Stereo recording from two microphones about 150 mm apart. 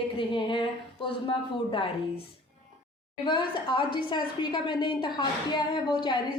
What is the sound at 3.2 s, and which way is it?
Speech, 30° left (ahead or behind).